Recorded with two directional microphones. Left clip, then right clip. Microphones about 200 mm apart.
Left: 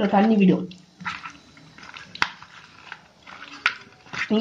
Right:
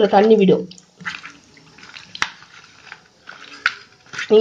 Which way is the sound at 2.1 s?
10° right (ahead or behind).